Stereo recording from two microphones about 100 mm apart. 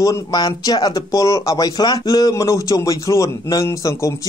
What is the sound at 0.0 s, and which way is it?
Speech, 40° left (ahead or behind).